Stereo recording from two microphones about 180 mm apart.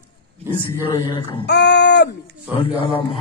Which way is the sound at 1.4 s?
70° left (ahead or behind).